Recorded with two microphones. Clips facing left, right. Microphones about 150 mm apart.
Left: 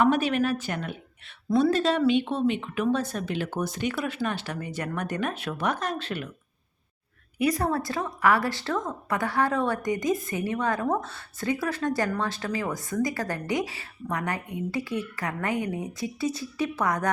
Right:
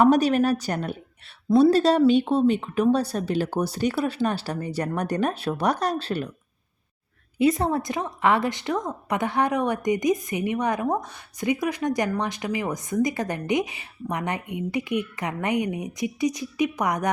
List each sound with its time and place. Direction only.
0.0 s a woman's voice: 40° right (ahead or behind)
7.3 s a woman's voice: 25° right (ahead or behind)